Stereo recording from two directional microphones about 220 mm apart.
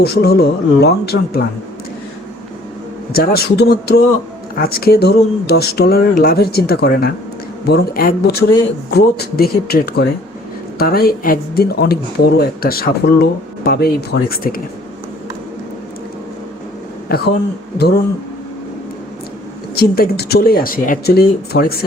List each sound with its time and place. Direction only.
0.0 s speech: 45° left (ahead or behind)
3.1 s speech: 45° left (ahead or behind)
17.1 s speech: 40° left (ahead or behind)
19.7 s speech: 45° left (ahead or behind)